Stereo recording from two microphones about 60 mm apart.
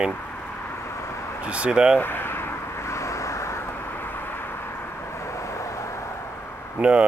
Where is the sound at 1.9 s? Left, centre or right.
Left.